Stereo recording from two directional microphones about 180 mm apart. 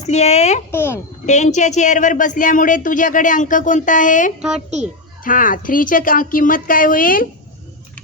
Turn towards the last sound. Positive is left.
turn(degrees=50)  # may be behind; listen again after turning